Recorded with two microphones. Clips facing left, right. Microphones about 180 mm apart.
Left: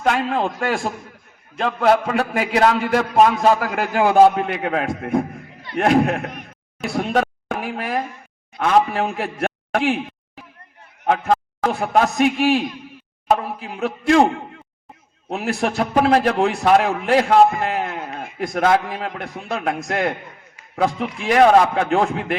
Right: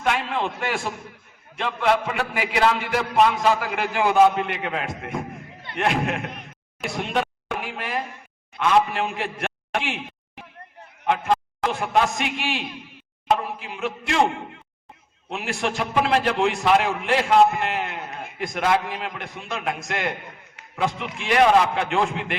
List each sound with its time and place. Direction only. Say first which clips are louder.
0.0 s a man's voice: left 5 dB; 40° left (ahead or behind)
6.8 s a sound: left 5 dB; 45° left (ahead or behind)
8.5 s a man's voice: left 3 dB; 45° left (ahead or behind)
11.0 s a man's voice: left 3 dB; 40° left (ahead or behind)
15.3 s a man's voice: left 5 dB; 45° left (ahead or behind)